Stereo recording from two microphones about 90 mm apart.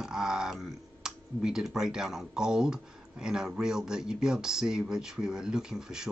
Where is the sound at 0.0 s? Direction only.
5° right (ahead or behind).